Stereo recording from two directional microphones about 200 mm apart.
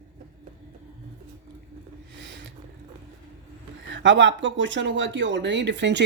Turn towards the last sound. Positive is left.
turn(degrees=-60)  # may be behind; listen again after turning